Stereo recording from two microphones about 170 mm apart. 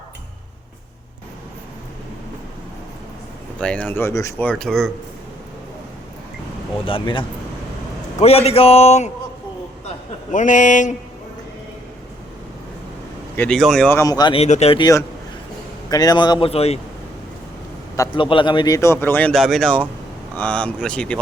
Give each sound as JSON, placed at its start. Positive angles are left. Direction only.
{"t": 3.6, "sound": "speech", "side_deg": 5}
{"t": 6.8, "sound": "a man's voice", "side_deg": 30}
{"t": 10.3, "sound": "speech", "side_deg": 50}
{"t": 13.3, "sound": "speech", "side_deg": 10}
{"t": 14.0, "sound": "speech", "side_deg": 25}
{"t": 14.3, "sound": "a man's voice", "side_deg": 40}
{"t": 15.9, "sound": "speech", "side_deg": 25}
{"t": 17.9, "sound": "a man's voice", "side_deg": 20}